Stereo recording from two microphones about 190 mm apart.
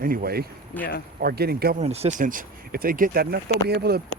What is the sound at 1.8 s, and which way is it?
Speech, 35° right (ahead or behind).